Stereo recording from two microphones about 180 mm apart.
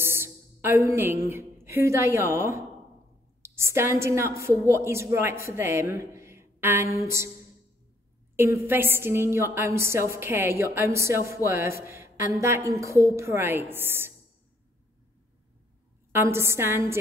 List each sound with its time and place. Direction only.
0.0 s a sound: 10° right (ahead or behind)
1.2 s a woman's voice: 15° right (ahead or behind)
8.4 s a woman's voice: 10° right (ahead or behind)
16.1 s a woman's voice: 15° right (ahead or behind)